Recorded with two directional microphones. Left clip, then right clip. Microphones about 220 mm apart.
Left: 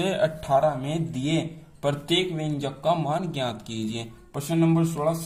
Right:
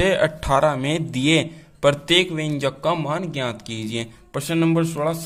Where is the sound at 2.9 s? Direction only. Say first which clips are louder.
Right 2 dB; 25° right (ahead or behind).